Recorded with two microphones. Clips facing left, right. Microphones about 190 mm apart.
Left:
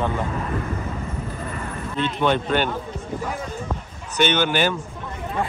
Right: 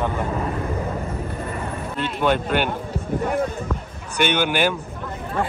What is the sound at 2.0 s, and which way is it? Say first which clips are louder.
Speech: even; 10° right (ahead or behind).